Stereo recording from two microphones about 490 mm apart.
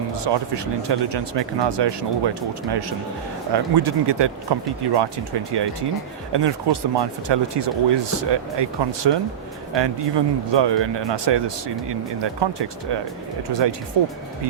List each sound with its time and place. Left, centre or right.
0.1 s speech: right